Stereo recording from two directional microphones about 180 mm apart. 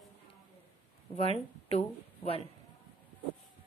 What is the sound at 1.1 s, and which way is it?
Speech, 35° left (ahead or behind).